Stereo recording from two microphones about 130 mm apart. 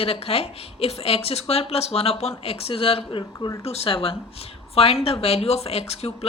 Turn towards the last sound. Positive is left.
turn(degrees=50)  # may be behind; listen again after turning